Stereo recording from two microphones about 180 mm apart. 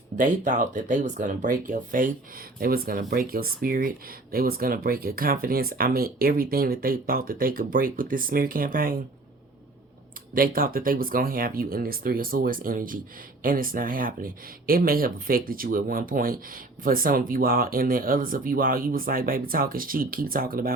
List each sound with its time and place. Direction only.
0.2 s speech: 45° right (ahead or behind)
10.3 s speech: 55° right (ahead or behind)